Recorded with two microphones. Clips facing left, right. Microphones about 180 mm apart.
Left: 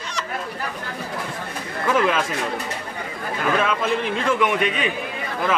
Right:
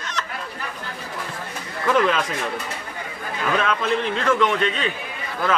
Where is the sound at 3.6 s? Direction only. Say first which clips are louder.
Even; 10° left (ahead or behind).